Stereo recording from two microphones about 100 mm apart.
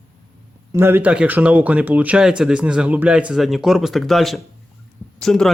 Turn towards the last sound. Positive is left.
turn(degrees=5)  # may be behind; listen again after turning